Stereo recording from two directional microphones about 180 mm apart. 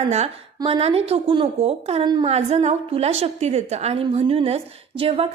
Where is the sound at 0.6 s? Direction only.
35° right (ahead or behind).